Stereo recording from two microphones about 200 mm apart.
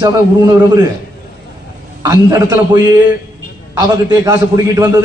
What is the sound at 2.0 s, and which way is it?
A man's voice, 15° right (ahead or behind).